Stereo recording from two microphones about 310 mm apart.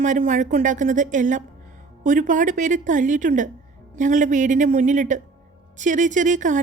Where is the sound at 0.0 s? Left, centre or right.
Right.